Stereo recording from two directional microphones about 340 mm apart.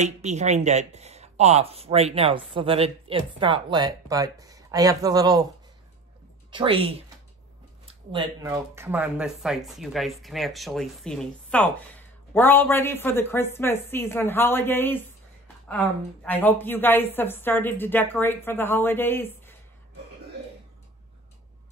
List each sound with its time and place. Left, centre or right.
0.0 s speech: centre
6.5 s speech: centre
8.1 s speech: centre
16.3 s a woman's voice: centre